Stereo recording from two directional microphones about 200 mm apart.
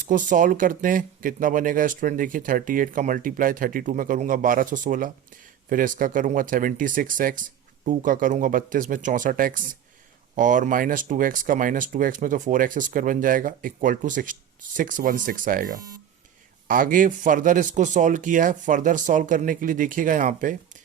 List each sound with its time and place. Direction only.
0.0 s a man's voice: 40° right (ahead or behind)